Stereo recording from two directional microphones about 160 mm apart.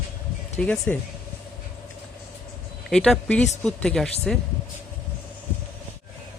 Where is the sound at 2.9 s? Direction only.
5° left (ahead or behind).